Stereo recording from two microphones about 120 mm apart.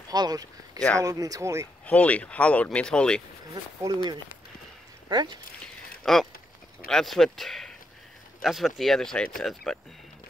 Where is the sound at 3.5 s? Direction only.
30° right (ahead or behind).